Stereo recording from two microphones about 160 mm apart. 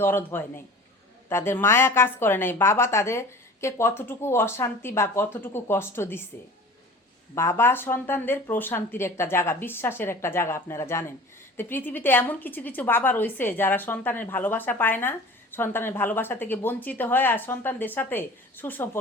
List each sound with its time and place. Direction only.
0.0 s speech: 15° left (ahead or behind)
7.3 s speech: 15° left (ahead or behind)